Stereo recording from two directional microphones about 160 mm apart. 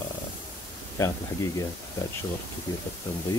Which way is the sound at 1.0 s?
15° left (ahead or behind).